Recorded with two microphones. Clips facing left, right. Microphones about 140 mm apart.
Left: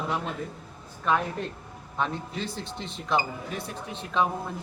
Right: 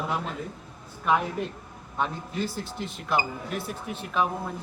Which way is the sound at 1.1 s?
10° right (ahead or behind).